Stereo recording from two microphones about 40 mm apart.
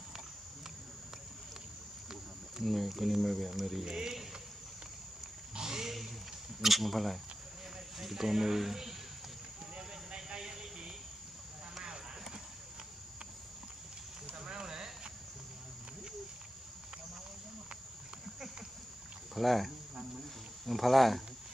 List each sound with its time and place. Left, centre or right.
2.6 s speech: centre
3.8 s speech: centre
5.5 s a sound: centre
6.6 s speech: centre
9.8 s vehicle: centre
14.4 s a sound: centre
19.3 s speech: centre